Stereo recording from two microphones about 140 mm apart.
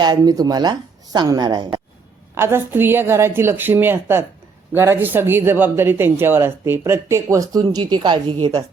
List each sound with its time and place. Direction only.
0.0 s a woman's voice: 30° right (ahead or behind)
2.3 s speech: 15° right (ahead or behind); by 8.6 s 35° right (ahead or behind)